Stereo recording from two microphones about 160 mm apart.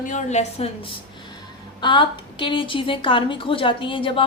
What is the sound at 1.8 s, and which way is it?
A woman's voice, 30° left (ahead or behind).